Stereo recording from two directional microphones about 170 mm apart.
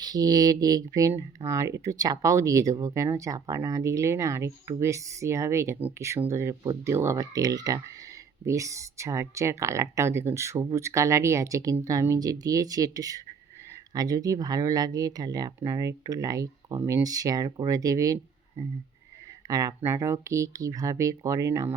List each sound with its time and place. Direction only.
0.0 s speech: 20° right (ahead or behind)
19.5 s speech: 20° right (ahead or behind)